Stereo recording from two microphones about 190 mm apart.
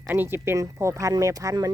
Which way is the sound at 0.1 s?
10° right (ahead or behind).